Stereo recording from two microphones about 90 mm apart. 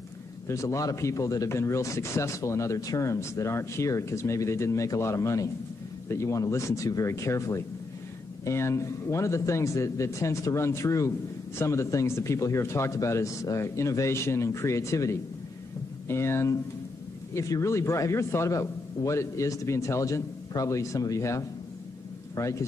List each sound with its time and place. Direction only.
0.5 s speech: 35° left (ahead or behind)